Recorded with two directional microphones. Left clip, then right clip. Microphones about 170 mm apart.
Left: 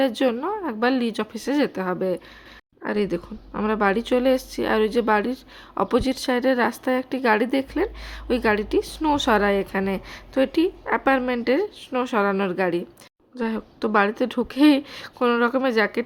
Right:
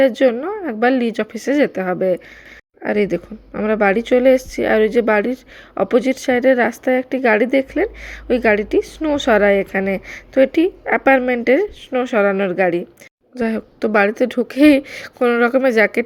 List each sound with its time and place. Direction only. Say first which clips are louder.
0.0 s speech: right 8 dB; 5° right (ahead or behind)